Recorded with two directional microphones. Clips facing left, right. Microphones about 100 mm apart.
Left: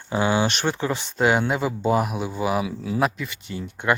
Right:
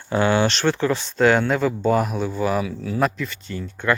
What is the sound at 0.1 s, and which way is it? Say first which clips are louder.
Speech: right 3 dB; 15° left (ahead or behind).